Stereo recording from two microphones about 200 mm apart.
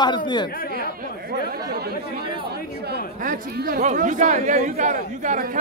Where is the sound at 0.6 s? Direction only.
50° left (ahead or behind).